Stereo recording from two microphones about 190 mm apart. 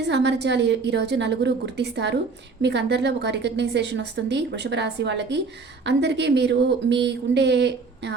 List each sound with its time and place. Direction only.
0.1 s a woman's voice: 65° right (ahead or behind)